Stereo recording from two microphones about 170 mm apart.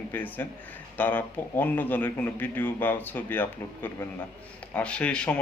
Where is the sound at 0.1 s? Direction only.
10° left (ahead or behind).